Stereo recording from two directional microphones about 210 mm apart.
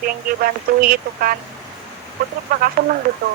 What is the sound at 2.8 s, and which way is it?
Speech, 45° right (ahead or behind).